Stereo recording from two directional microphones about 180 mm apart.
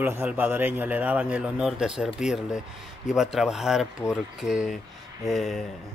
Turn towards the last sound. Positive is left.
turn(degrees=0)  # may be behind; listen again after turning